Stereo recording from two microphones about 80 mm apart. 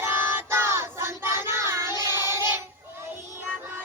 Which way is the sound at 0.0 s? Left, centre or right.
Right.